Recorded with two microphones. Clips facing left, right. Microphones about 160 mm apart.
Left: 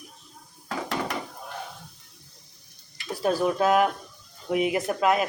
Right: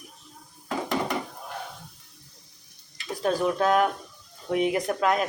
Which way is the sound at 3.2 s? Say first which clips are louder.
Left 1 dB; 5° left (ahead or behind).